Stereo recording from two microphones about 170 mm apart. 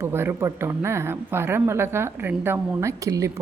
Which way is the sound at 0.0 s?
15° right (ahead or behind).